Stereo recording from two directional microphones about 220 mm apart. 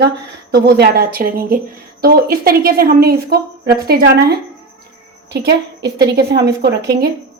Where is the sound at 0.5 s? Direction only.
50° right (ahead or behind).